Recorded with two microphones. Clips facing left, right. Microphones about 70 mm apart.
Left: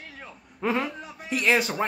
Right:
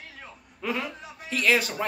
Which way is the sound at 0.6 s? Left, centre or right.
Left.